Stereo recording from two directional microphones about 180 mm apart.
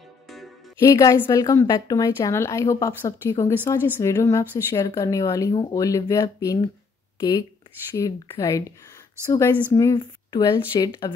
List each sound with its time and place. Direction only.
0.7 s a woman's voice: 15° left (ahead or behind)